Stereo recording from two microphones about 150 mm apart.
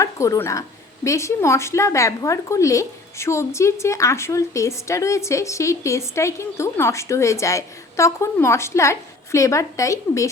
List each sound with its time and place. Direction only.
0.0 s speech: 20° left (ahead or behind)